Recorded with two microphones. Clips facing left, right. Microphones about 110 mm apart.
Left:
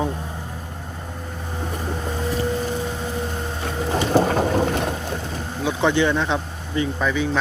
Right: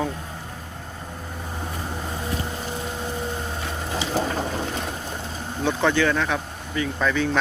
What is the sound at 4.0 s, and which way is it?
Boat, 55° left (ahead or behind).